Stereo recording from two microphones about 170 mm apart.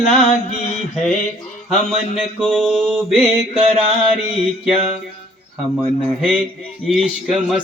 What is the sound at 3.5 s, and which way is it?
Mantra, 35° right (ahead or behind).